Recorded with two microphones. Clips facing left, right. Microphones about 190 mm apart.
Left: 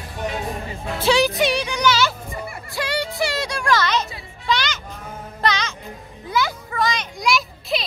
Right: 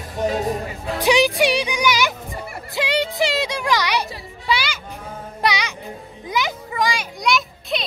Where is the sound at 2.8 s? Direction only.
20° right (ahead or behind).